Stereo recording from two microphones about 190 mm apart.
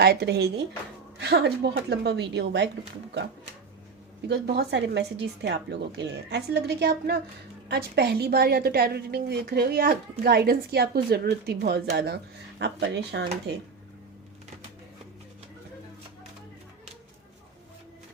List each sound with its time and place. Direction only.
0.0 s a woman's voice: 60° right (ahead or behind)
4.3 s a woman's voice: 60° right (ahead or behind)